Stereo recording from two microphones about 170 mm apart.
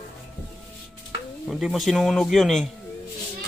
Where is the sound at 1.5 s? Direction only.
Centre (ahead or behind).